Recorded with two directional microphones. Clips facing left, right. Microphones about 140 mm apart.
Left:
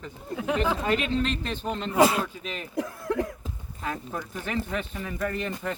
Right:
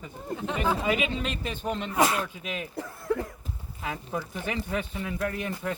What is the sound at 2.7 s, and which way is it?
Cough, 90° left.